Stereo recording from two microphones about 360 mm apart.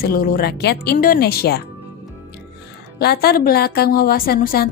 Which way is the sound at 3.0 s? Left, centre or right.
Left.